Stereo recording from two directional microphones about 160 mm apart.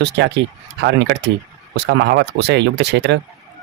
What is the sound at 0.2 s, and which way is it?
Speech, 90° right.